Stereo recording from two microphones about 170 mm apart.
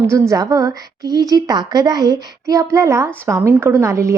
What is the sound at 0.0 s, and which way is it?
A woman's voice, 15° right (ahead or behind).